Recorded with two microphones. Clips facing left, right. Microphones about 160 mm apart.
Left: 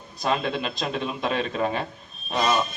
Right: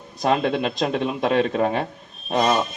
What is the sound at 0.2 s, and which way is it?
Speech, 60° right (ahead or behind).